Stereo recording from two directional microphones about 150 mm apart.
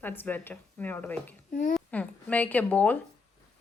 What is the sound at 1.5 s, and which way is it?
Speech, 60° left (ahead or behind).